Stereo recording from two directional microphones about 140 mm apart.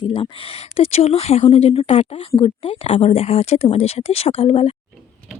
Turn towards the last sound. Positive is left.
turn(degrees=45)  # may be behind; listen again after turning